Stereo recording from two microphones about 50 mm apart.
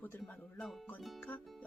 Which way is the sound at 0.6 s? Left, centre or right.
Centre.